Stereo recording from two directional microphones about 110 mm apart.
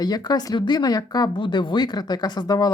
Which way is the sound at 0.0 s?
40° left (ahead or behind).